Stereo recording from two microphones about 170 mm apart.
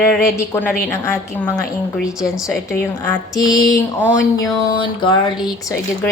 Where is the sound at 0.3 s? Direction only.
15° left (ahead or behind).